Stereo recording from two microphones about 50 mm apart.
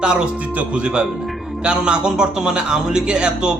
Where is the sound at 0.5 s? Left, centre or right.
Right.